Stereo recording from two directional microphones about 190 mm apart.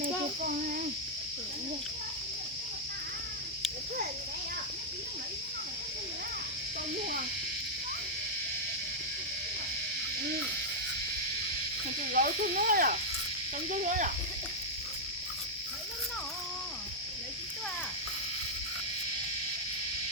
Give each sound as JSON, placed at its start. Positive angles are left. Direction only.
{"t": 0.0, "sound": "child singing", "side_deg": -50}
{"t": 12.1, "sound": "snake", "side_deg": -45}
{"t": 13.7, "sound": "speech", "side_deg": -40}